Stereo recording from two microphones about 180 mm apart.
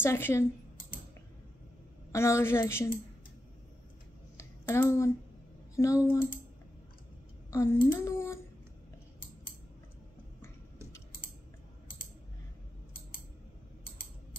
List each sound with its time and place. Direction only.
0.0 s a woman's voice: 15° left (ahead or behind)
0.7 s typing: 55° left (ahead or behind)
2.1 s a woman's voice: 15° left (ahead or behind)
4.4 s a sound: 15° left (ahead or behind)
5.8 s a woman's voice: 15° left (ahead or behind)
7.5 s a woman's voice: 15° left (ahead or behind)